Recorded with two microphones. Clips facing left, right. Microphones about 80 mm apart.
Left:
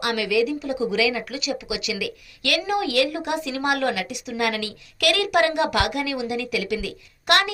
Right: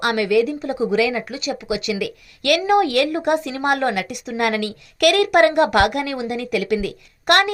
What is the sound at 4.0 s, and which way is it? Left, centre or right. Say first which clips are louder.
A woman's voice: right 4 dB; right.